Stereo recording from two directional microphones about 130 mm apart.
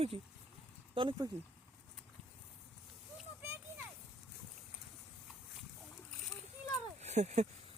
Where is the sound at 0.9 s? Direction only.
40° right (ahead or behind).